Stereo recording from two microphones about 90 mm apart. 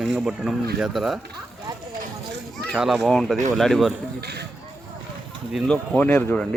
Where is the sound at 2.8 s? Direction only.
Centre (ahead or behind).